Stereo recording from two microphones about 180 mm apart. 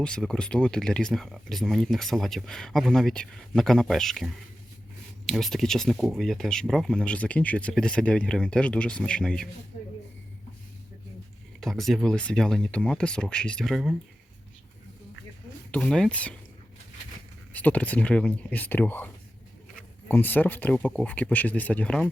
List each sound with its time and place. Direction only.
0.0 s speech: 5° left (ahead or behind)
11.6 s speech: centre (ahead or behind)
15.7 s speech: 5° left (ahead or behind)
17.5 s speech: 10° left (ahead or behind)